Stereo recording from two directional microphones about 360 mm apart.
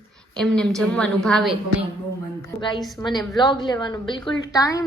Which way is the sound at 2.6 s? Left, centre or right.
Centre.